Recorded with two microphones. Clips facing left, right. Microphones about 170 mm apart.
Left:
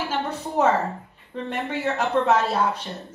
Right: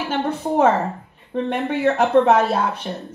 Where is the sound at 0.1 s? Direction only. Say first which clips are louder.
Right 5 dB; 55° right (ahead or behind).